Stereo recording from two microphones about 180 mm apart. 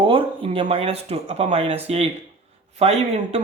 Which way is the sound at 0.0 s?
30° right (ahead or behind).